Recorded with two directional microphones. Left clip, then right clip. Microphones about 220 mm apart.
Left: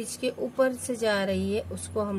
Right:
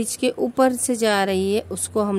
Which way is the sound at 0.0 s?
50° right (ahead or behind).